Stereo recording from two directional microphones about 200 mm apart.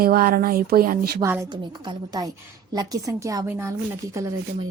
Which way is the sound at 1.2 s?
15° right (ahead or behind).